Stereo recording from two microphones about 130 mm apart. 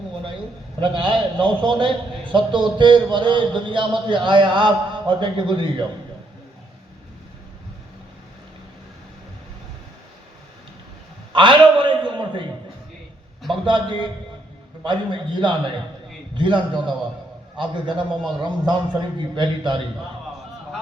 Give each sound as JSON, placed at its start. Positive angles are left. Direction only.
{"t": 0.8, "sound": "a man's voice", "side_deg": -40}
{"t": 11.3, "sound": "a sound", "side_deg": -40}
{"t": 13.7, "sound": "a man's voice", "side_deg": -40}